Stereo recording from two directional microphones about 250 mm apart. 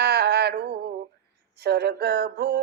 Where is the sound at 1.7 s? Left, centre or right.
Right.